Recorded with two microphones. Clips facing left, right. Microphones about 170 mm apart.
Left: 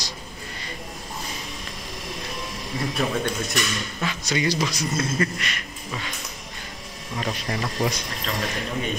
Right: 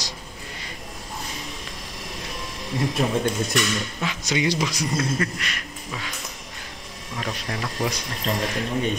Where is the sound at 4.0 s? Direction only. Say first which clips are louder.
Left 1 dB; 15° right (ahead or behind).